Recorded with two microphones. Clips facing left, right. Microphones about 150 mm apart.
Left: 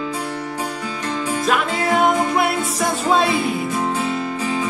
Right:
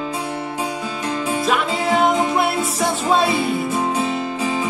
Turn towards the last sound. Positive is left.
turn(degrees=-15)  # may be behind; listen again after turning